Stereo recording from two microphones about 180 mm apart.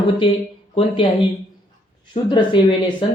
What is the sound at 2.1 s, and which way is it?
Speech, 25° left (ahead or behind).